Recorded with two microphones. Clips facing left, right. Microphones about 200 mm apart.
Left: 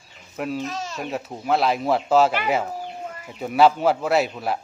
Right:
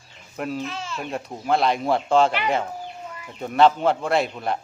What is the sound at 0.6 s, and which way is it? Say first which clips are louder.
Speech: left 1 dB; 40° left (ahead or behind).